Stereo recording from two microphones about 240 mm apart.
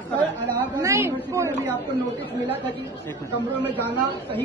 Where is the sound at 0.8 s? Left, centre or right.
Centre.